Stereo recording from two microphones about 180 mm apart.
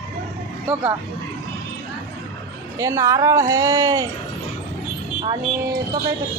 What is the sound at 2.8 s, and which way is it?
A woman's voice, 15° right (ahead or behind).